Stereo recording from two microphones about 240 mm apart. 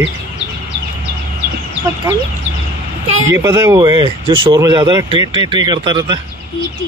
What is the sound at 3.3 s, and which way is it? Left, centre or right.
Speech, centre.